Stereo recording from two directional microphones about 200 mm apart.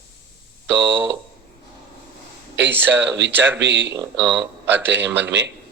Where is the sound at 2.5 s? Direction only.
60° right (ahead or behind).